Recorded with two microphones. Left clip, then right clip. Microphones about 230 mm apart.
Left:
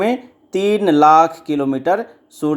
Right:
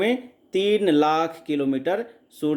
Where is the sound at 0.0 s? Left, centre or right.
Centre.